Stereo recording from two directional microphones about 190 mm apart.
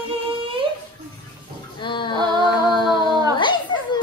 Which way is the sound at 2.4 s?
25° left (ahead or behind).